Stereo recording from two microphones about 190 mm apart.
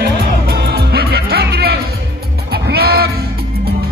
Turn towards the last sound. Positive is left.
turn(degrees=-55)  # may be behind; listen again after turning